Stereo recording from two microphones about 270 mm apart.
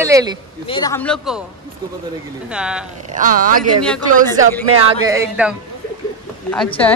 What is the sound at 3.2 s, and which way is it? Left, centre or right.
Speech, right.